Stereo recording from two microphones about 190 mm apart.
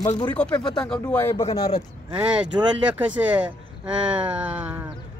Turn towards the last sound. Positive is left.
turn(degrees=-10)  # may be behind; listen again after turning